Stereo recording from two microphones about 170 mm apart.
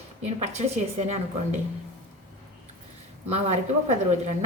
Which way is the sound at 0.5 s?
40° right (ahead or behind).